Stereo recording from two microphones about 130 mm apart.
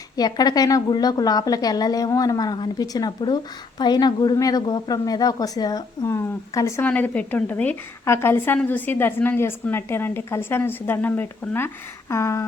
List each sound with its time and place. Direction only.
0.2 s a woman's voice: 30° left (ahead or behind)
6.8 s a woman's voice: 10° left (ahead or behind)